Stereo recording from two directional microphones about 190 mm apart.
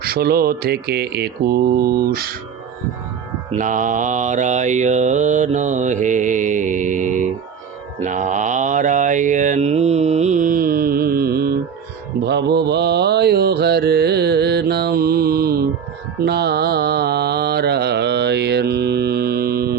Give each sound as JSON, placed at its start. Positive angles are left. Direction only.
{"t": 0.0, "sound": "speech", "side_deg": -55}
{"t": 3.5, "sound": "mantra", "side_deg": -40}